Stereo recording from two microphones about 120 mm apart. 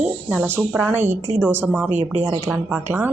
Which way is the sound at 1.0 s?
70° right (ahead or behind).